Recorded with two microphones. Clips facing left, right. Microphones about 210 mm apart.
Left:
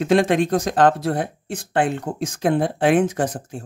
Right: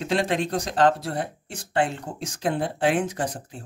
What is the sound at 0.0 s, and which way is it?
Speech, 50° left (ahead or behind).